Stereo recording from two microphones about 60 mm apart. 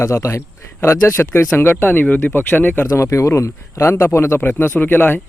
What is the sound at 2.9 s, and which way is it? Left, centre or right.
Speech, left.